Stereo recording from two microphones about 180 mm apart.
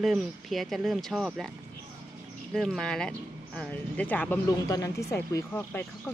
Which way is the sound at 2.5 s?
Centre (ahead or behind).